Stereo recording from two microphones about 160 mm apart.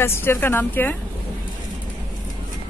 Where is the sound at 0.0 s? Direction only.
15° left (ahead or behind).